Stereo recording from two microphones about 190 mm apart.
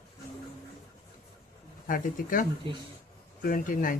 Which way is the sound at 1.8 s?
45° left (ahead or behind).